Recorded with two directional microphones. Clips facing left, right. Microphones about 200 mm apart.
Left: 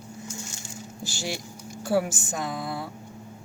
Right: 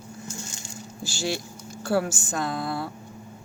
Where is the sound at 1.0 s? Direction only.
20° left (ahead or behind).